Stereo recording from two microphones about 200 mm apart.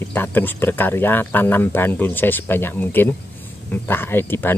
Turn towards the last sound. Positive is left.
turn(degrees=10)  # may be behind; listen again after turning